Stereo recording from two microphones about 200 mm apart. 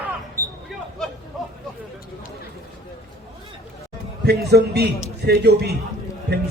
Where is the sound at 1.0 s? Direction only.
Centre (ahead or behind).